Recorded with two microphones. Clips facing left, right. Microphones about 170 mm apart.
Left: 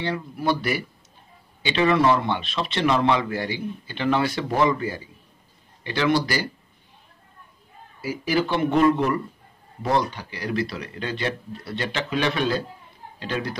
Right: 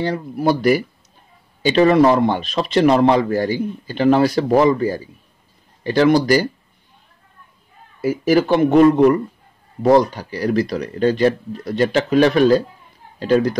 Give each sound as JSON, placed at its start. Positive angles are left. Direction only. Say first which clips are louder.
{"t": 0.0, "sound": "a man's voice", "louder": "right 7 dB", "side_deg": -40}
{"t": 8.0, "sound": "a man's voice", "louder": "right 8 dB", "side_deg": -50}